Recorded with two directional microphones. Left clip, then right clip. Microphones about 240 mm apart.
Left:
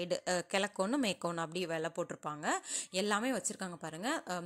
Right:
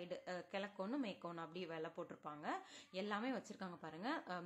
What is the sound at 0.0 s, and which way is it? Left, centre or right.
Speech, left.